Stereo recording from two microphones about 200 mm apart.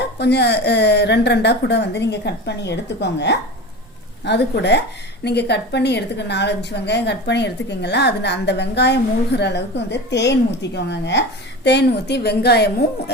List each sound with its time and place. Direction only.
0.2 s a woman's voice: 55° left (ahead or behind)